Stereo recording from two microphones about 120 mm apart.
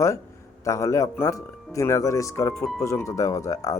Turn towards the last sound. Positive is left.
turn(degrees=25)  # may be behind; listen again after turning